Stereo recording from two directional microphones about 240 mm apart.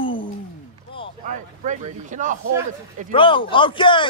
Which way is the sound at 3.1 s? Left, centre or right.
Left.